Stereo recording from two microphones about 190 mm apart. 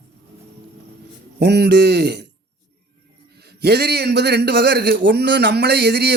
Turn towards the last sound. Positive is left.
turn(degrees=-60)  # may be behind; listen again after turning